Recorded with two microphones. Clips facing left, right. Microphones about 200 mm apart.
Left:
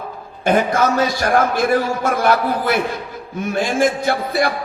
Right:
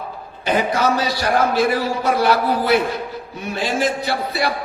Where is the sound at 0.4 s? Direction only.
50° left (ahead or behind).